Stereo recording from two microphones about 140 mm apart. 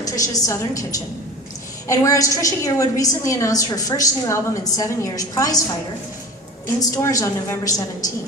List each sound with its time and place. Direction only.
0.0 s a woman's voice: 25° left (ahead or behind)
6.7 s a woman's voice: 25° left (ahead or behind)